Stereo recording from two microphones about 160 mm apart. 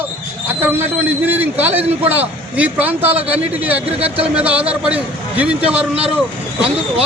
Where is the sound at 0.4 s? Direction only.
10° right (ahead or behind).